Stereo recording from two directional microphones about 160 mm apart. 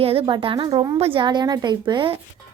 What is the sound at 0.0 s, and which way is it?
A woman's voice, 35° right (ahead or behind).